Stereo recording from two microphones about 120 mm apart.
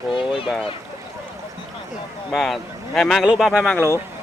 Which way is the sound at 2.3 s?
Centre (ahead or behind).